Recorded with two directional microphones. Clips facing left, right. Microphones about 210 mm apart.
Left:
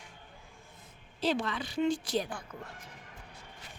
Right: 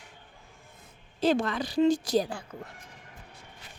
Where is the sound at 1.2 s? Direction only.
45° right (ahead or behind).